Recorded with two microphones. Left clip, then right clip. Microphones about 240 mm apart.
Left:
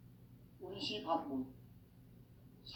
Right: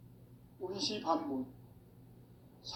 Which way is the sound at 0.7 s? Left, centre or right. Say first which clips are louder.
Right 4 dB; right.